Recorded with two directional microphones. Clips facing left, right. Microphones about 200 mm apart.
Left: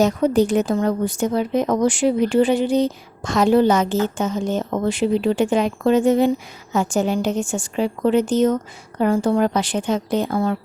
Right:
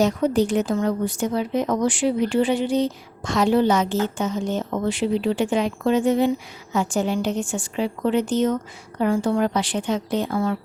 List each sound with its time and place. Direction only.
0.0 s speech: 45° left (ahead or behind)